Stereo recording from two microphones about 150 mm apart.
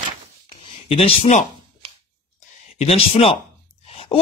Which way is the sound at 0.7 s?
40° left (ahead or behind).